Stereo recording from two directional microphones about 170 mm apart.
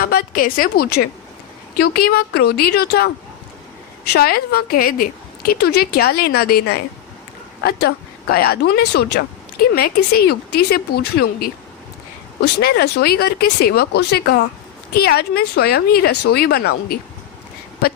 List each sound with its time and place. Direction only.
0.0 s a woman's voice: 65° left (ahead or behind)
4.1 s a woman's voice: 65° left (ahead or behind)
9.7 s a woman's voice: 65° left (ahead or behind)